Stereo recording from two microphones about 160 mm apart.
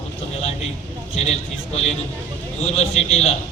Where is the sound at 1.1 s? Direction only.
40° left (ahead or behind).